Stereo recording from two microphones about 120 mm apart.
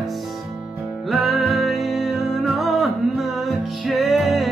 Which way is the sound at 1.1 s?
Centre (ahead or behind).